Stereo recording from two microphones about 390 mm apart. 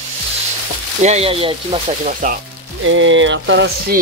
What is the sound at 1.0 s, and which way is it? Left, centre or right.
Speech, centre.